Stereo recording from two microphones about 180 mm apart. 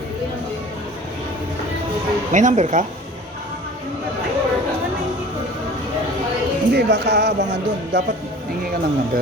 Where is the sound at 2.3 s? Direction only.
45° right (ahead or behind).